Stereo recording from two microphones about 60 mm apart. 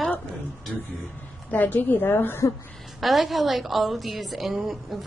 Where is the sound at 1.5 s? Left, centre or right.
Left.